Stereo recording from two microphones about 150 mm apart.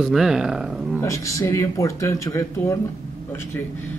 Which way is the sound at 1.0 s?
20° left (ahead or behind).